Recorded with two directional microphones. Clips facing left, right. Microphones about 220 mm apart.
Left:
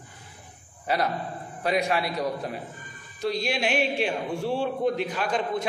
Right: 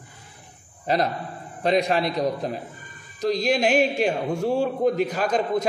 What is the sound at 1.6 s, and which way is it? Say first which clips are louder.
A man's voice: right 4 dB; 35° right (ahead or behind).